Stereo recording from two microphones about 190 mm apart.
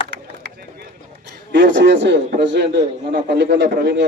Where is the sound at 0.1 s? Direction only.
60° right (ahead or behind).